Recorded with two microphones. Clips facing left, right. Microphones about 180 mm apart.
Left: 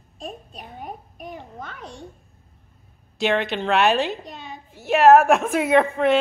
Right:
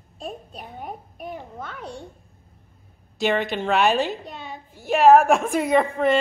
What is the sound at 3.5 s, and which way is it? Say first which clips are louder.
A woman's voice: left 1 dB; 5° right (ahead or behind).